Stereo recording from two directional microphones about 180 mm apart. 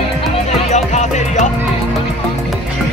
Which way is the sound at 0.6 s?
40° left (ahead or behind).